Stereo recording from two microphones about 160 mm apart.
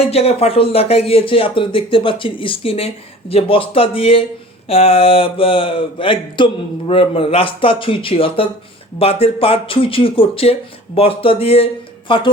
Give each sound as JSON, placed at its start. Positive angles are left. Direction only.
{"t": 0.0, "sound": "speech", "side_deg": 40}